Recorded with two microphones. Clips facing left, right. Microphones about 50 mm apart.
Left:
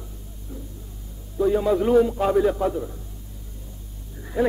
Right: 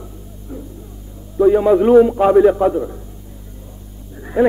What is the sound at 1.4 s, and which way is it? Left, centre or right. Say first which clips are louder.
A man's voice: right 8 dB; right.